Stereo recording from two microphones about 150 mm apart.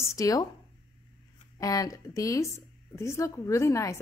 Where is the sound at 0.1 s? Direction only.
25° left (ahead or behind).